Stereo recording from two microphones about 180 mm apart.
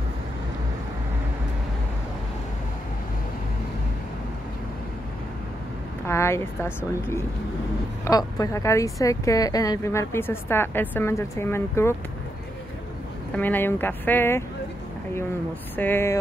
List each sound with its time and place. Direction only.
6.0 s a woman's voice: 15° left (ahead or behind)
8.0 s a woman's voice: 20° left (ahead or behind)
13.4 s a woman's voice: 10° left (ahead or behind)
15.7 s a woman's voice: 10° left (ahead or behind)